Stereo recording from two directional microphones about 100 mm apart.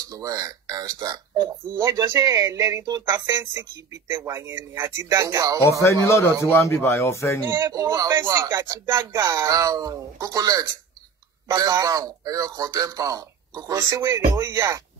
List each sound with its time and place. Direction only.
0.1 s speech: 35° right (ahead or behind)
4.1 s a man's voice: 25° right (ahead or behind)
5.7 s speech: 30° left (ahead or behind)
7.4 s speech: 45° right (ahead or behind)
7.8 s a man's voice: 30° right (ahead or behind)
8.5 s speech: 45° right (ahead or behind)